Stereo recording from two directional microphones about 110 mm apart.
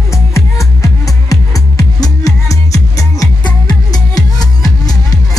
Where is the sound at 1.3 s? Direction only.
30° left (ahead or behind).